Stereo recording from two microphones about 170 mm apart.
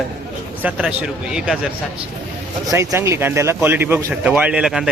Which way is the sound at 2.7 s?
15° right (ahead or behind).